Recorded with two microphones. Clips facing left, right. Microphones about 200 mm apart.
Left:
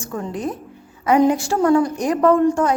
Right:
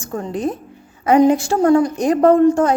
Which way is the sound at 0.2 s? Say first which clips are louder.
Right 4 dB; 25° right (ahead or behind).